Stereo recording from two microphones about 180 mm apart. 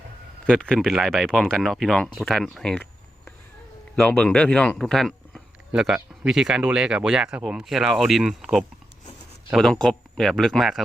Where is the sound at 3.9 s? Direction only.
5° left (ahead or behind).